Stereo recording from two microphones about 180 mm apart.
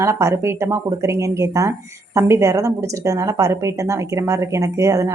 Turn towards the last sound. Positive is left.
turn(degrees=-15)  # may be behind; listen again after turning